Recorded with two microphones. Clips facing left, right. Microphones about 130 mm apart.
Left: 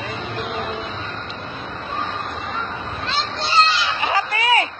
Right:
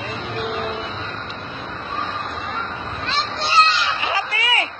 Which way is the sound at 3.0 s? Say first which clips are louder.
Right 1 dB; centre (ahead or behind).